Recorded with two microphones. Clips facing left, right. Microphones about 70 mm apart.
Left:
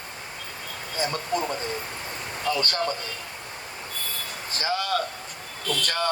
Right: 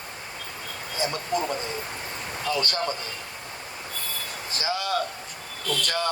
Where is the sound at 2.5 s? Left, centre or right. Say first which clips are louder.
Left 1 dB; left.